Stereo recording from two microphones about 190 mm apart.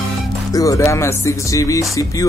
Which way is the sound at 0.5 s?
15° left (ahead or behind).